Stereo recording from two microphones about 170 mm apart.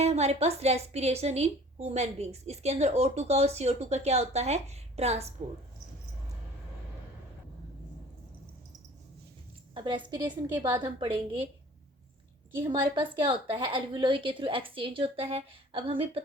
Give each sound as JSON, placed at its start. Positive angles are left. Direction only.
{"t": 0.0, "sound": "a woman's voice", "side_deg": -40}
{"t": 9.7, "sound": "a woman's voice", "side_deg": -25}
{"t": 12.9, "sound": "a woman's voice", "side_deg": -30}